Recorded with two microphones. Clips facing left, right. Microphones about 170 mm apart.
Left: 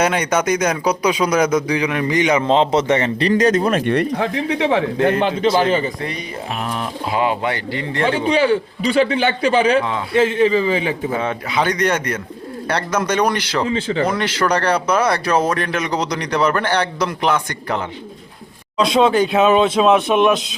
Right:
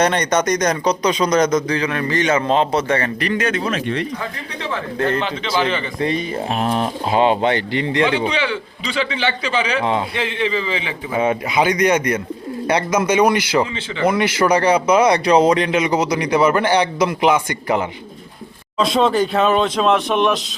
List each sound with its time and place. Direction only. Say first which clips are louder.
0.0 s a man's voice: right 1 dB; 5° left (ahead or behind)
3.2 s a man's voice: left 8 dB; 35° left (ahead or behind)
3.6 s speech: left 5 dB; 50° left (ahead or behind); by 4.9 s 70° left (ahead or behind)
5.5 s a man's voice: right 1 dB; 45° left (ahead or behind)
6.0 s speech: right 6 dB; 25° right (ahead or behind)
8.0 s a man's voice: left 8 dB; 40° left (ahead or behind)
9.8 s speech: right 3 dB; 20° right (ahead or behind)
10.2 s a man's voice: left 7 dB; 40° left (ahead or behind)
11.2 s speech: right 3 dB; 10° right (ahead or behind)
13.7 s a man's voice: left 8 dB; 40° left (ahead or behind)
14.1 s speech: right 3 dB; 10° right (ahead or behind)
18.8 s speech: left 2 dB; centre (ahead or behind)